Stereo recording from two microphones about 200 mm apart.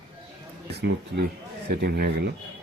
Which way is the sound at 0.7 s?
55° right (ahead or behind).